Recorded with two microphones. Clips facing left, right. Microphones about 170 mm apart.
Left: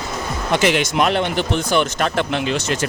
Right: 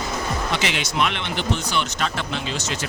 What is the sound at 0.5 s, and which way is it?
Speech, 50° left (ahead or behind).